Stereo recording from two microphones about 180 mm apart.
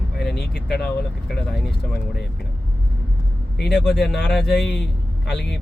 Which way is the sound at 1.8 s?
60° left (ahead or behind).